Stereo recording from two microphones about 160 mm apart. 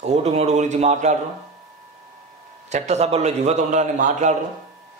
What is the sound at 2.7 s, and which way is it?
A man's voice, 45° right (ahead or behind).